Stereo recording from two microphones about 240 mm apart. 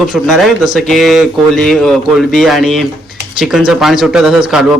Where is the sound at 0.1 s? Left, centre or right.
Centre.